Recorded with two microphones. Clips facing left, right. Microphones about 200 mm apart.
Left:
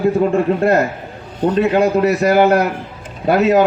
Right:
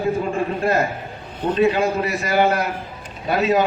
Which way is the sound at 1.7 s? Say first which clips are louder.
Left 7 dB; 65° left (ahead or behind).